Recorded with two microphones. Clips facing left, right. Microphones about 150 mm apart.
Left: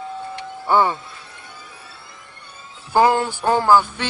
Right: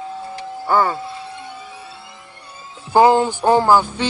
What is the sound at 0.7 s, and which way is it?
Speech, centre (ahead or behind).